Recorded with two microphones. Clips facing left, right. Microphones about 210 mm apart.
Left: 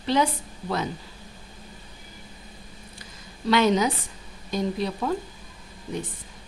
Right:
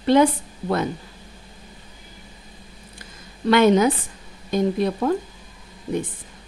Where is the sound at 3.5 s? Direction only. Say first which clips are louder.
Right 5 dB; 55° right (ahead or behind).